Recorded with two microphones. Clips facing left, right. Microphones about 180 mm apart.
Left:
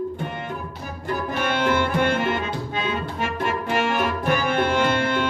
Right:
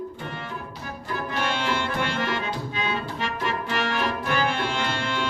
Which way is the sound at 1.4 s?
55° left (ahead or behind).